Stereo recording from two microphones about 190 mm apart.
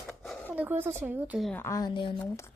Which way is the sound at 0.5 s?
10° right (ahead or behind).